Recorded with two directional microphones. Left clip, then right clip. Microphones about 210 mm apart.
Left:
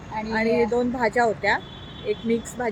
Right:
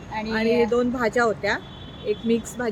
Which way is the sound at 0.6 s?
10° right (ahead or behind).